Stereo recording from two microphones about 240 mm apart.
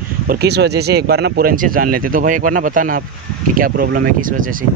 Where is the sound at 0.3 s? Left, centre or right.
Right.